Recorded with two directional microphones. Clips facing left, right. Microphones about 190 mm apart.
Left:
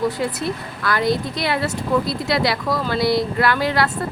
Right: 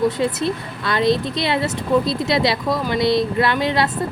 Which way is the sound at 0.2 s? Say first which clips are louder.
Right 3 dB; 25° right (ahead or behind).